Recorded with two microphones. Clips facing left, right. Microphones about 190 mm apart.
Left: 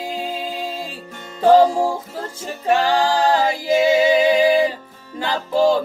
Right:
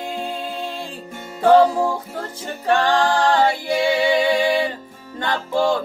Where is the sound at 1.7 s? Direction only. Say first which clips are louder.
Left 1 dB; 30° left (ahead or behind).